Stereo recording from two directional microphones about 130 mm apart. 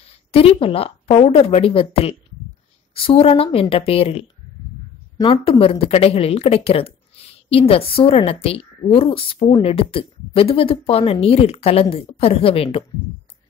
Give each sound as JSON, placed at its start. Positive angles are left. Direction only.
{"t": 0.3, "sound": "speech", "side_deg": 45}